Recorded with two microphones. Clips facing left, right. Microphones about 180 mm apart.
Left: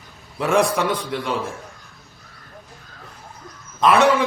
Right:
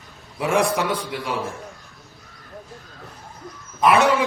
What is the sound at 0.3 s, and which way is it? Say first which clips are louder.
Speech: left 2 dB; 10° right (ahead or behind).